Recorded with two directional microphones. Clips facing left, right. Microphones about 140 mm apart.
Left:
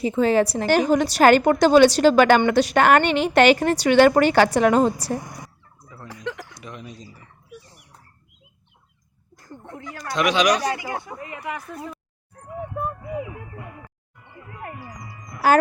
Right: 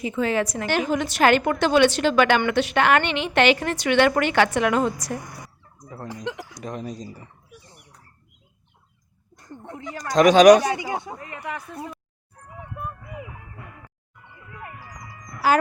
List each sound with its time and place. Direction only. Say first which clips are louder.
0.0 s a woman's voice: left 5 dB; 30° left (ahead or behind)
6.2 s speech: left 2 dB; 15° right (ahead or behind)
6.5 s speech: right 6 dB; 40° right (ahead or behind)
9.3 s a sound: right 1 dB; 20° right (ahead or behind)
10.0 s speech: right 7 dB; 40° right (ahead or behind)
10.6 s speech: right 1 dB; 20° right (ahead or behind)
11.2 s speech: left 2 dB; 10° left (ahead or behind)
14.8 s music: left 3 dB; 30° left (ahead or behind)